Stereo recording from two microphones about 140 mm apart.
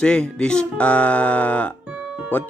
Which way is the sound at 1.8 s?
5° right (ahead or behind).